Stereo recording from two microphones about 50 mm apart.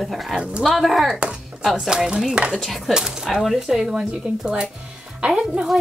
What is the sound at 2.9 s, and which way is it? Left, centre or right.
Speech, centre.